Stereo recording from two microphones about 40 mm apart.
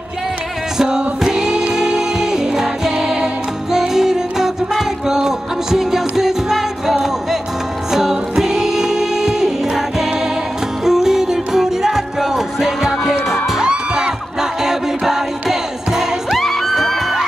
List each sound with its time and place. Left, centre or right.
0.7 s music: centre
16.3 s music: centre